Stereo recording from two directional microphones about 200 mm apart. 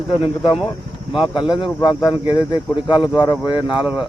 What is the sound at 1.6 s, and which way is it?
Speech, 20° left (ahead or behind).